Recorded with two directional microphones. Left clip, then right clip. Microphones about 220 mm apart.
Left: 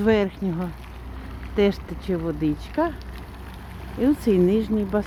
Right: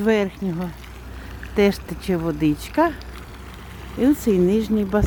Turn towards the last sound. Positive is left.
turn(degrees=-20)  # may be behind; listen again after turning